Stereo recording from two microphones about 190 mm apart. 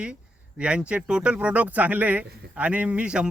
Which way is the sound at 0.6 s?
5° right (ahead or behind).